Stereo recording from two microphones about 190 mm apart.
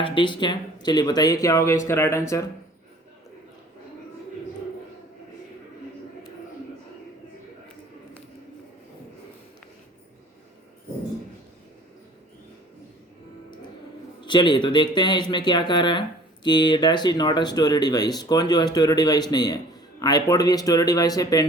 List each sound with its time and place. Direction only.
0.0 s speech: 25° left (ahead or behind)
14.3 s speech: 25° left (ahead or behind)